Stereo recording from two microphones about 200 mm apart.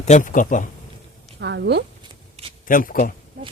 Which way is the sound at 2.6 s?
40° left (ahead or behind).